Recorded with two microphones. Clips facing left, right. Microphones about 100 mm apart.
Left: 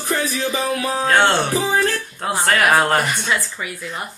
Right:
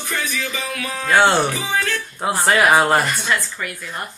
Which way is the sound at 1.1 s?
5° right (ahead or behind).